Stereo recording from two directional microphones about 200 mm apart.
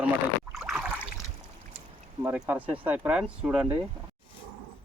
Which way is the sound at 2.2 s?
5° right (ahead or behind).